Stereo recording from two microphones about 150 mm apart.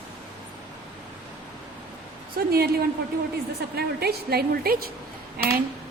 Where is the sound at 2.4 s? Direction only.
90° right.